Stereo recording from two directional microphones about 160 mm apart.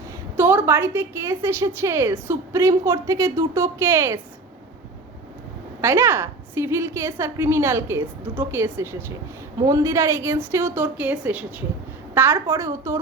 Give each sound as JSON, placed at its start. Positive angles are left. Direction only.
{"t": 0.3, "sound": "a woman's voice", "side_deg": -15}
{"t": 5.8, "sound": "a woman's voice", "side_deg": -15}